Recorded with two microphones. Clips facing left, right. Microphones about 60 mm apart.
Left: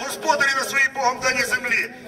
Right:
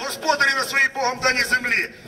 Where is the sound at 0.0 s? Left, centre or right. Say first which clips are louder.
Even; centre.